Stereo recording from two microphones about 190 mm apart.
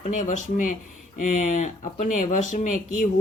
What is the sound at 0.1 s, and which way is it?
Speech, 40° left (ahead or behind).